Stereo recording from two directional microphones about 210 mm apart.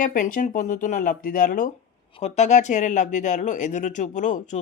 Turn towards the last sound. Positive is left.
turn(degrees=35)  # may be behind; listen again after turning